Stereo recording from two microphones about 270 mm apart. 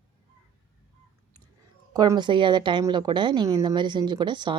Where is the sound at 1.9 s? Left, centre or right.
Centre.